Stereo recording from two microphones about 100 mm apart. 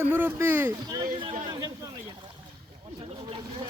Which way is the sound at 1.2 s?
55° right (ahead or behind).